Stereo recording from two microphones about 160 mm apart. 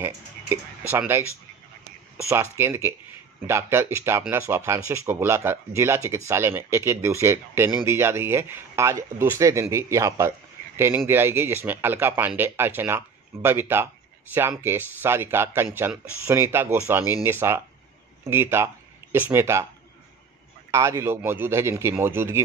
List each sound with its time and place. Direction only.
0.8 s speech: 15° right (ahead or behind)
2.5 s speech: 15° right (ahead or behind)
20.7 s speech: 20° right (ahead or behind)